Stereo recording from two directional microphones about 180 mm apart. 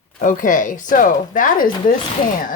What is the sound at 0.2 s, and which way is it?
Speech, 45° left (ahead or behind).